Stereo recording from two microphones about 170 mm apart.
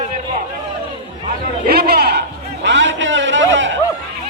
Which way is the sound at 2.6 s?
90° right.